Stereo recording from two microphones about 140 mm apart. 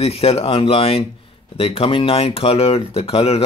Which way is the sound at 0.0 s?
45° left (ahead or behind).